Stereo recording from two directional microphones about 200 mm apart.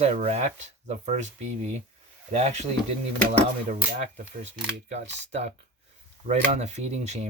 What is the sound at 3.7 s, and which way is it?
Speech, 35° right (ahead or behind).